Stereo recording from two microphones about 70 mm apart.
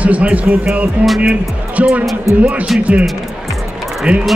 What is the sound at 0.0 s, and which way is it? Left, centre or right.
A man's voice, centre.